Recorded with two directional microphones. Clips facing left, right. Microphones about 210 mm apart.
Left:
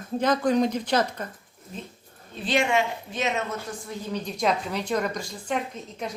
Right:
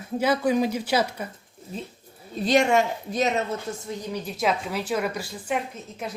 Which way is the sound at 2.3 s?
40° right (ahead or behind).